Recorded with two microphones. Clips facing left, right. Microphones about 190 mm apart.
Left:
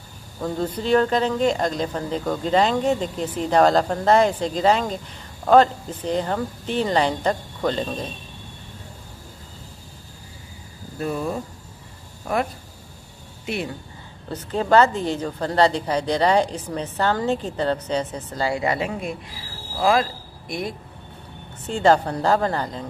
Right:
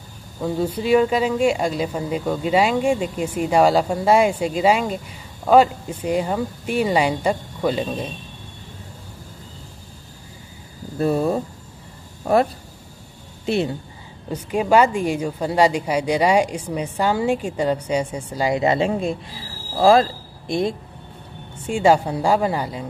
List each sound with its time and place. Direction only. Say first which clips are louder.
0.4 s speech: right 3 dB; 10° right (ahead or behind)
11.0 s speech: right 6 dB; 35° right (ahead or behind)
14.3 s speech: right 1 dB; 10° right (ahead or behind); by 20.7 s 25° right (ahead or behind)
21.5 s speech: right 1 dB; 10° right (ahead or behind)